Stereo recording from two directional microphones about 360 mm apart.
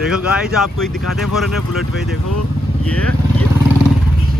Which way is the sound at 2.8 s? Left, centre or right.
Centre.